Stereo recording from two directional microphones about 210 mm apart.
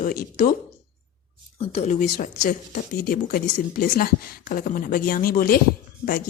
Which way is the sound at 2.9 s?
45° left (ahead or behind).